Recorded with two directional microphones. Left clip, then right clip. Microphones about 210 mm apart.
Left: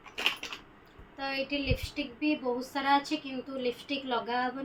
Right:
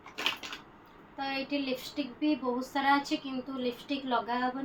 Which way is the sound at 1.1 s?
15° left (ahead or behind).